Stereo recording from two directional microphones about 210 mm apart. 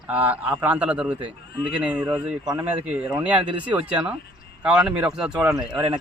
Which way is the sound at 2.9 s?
5° right (ahead or behind).